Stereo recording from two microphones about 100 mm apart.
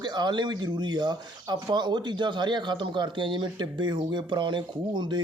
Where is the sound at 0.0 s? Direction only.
45° right (ahead or behind).